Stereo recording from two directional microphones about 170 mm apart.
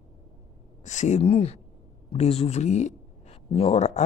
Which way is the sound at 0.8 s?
45° left (ahead or behind).